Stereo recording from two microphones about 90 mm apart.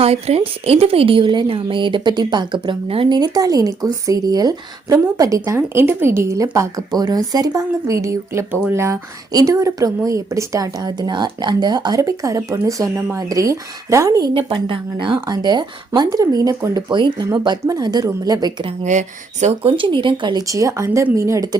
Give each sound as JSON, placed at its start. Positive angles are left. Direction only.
{"t": 0.0, "sound": "a woman's voice", "side_deg": -90}
{"t": 3.1, "sound": "a woman's voice", "side_deg": -45}
{"t": 5.5, "sound": "a woman's voice", "side_deg": -25}
{"t": 11.9, "sound": "a woman's voice", "side_deg": -35}
{"t": 14.3, "sound": "a woman's voice", "side_deg": -65}
{"t": 16.7, "sound": "a woman's voice", "side_deg": -60}
{"t": 19.6, "sound": "speech", "side_deg": -70}
{"t": 20.5, "sound": "a woman's voice", "side_deg": -35}